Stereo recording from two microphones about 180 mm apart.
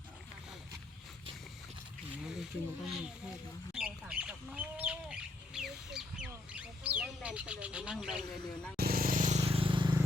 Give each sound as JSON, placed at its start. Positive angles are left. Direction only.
{"t": 2.2, "sound": "speech", "side_deg": 0}
{"t": 3.7, "sound": "bird", "side_deg": -5}
{"t": 8.8, "sound": "vehicle", "side_deg": -55}